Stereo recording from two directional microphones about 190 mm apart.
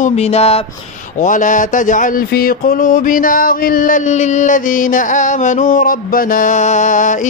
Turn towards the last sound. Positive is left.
turn(degrees=40)  # may be behind; listen again after turning